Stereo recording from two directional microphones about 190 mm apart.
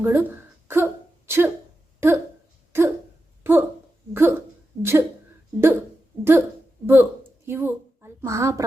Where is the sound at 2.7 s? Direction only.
10° right (ahead or behind).